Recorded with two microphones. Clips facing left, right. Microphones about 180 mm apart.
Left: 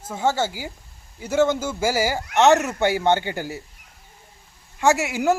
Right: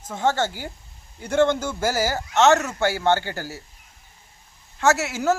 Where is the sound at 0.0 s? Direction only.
10° left (ahead or behind).